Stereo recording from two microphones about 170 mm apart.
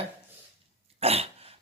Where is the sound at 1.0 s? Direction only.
35° right (ahead or behind).